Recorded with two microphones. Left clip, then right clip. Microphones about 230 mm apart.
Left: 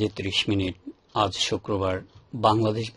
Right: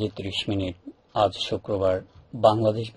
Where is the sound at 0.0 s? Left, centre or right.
Left.